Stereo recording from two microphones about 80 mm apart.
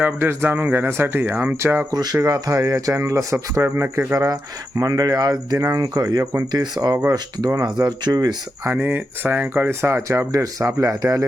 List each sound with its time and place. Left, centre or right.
0.0 s speech: right
1.9 s speech: right
8.6 s speech: right
10.3 s speech: right